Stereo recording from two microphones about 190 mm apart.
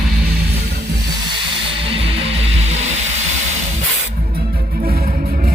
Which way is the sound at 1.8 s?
30° right (ahead or behind).